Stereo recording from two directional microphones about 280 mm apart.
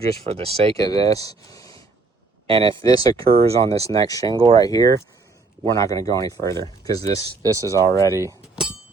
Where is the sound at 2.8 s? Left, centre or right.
Centre.